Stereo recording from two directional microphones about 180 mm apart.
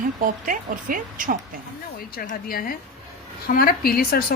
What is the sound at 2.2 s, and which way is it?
A woman's voice, 55° left (ahead or behind).